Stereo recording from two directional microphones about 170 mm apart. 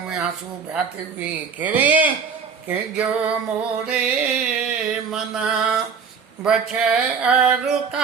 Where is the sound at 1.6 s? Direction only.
10° right (ahead or behind).